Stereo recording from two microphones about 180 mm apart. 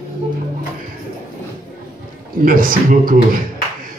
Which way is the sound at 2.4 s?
50° right (ahead or behind).